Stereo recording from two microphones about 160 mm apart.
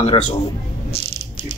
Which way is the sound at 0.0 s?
35° left (ahead or behind).